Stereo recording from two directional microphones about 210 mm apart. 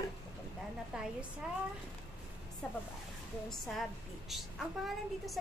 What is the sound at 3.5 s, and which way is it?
A woman's voice, centre (ahead or behind).